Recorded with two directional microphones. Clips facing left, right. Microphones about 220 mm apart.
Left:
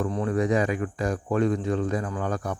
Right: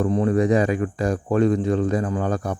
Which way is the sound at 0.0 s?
25° right (ahead or behind).